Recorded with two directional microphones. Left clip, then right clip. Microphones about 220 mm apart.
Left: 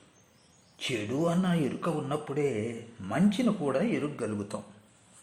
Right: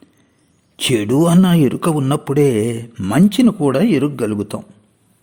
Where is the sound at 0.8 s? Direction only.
45° right (ahead or behind).